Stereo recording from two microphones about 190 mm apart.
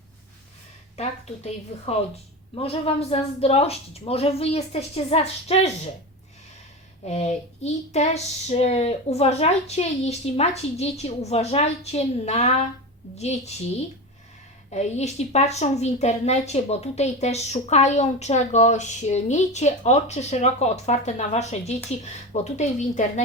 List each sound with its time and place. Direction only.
1.5 s speech: 35° left (ahead or behind)
7.0 s speech: 35° left (ahead or behind)
14.7 s speech: 35° left (ahead or behind)